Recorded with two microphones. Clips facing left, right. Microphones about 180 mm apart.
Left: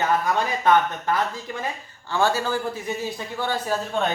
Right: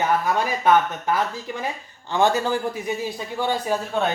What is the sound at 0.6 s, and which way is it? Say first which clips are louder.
Speech: right 1 dB; 5° right (ahead or behind).